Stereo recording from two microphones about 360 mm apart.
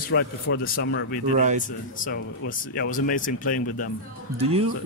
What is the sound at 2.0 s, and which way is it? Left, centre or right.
Speech, left.